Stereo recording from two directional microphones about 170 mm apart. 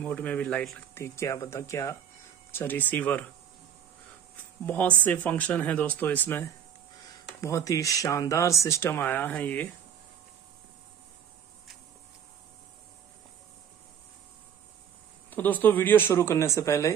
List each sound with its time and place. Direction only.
0.0 s speech: 5° left (ahead or behind)
4.6 s speech: 10° left (ahead or behind)
15.2 s speech: 10° left (ahead or behind)